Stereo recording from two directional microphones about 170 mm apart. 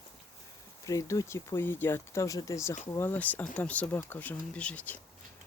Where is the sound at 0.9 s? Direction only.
20° left (ahead or behind).